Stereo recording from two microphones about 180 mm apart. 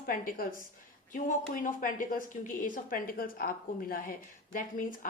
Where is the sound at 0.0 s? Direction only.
50° left (ahead or behind).